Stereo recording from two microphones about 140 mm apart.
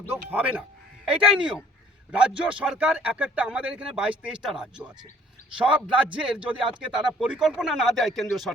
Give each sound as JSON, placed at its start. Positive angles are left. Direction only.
{"t": 0.3, "sound": "speech", "side_deg": -10}